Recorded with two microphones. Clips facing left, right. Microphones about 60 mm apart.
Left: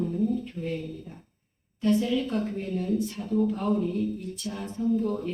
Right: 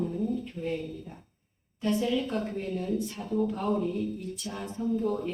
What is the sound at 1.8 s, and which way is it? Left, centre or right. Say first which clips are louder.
Speech: left 3 dB; centre.